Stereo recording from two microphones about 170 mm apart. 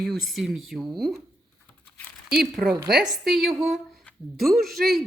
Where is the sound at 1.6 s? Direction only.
10° left (ahead or behind).